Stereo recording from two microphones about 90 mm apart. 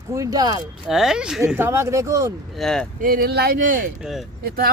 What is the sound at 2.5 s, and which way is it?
Speech, 5° left (ahead or behind).